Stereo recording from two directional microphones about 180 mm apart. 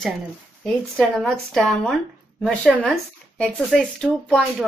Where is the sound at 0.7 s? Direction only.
Centre (ahead or behind).